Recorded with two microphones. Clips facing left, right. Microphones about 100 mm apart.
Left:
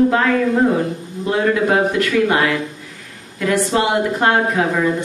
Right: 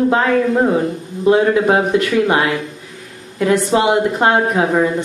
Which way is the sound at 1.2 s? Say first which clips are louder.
Right 4 dB; 25° right (ahead or behind).